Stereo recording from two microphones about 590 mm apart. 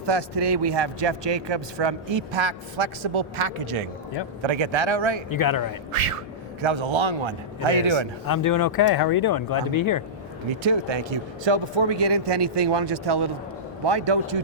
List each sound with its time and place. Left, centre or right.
0.0 s speech: right
5.3 s speech: left
5.9 s speech: right
8.3 s speech: left
10.6 s speech: right